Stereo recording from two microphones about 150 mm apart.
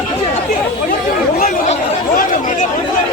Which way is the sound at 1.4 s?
60° left (ahead or behind).